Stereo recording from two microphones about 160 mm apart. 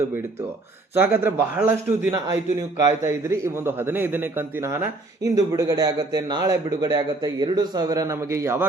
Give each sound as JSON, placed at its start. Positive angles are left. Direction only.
{"t": 0.9, "sound": "a man's voice", "side_deg": -15}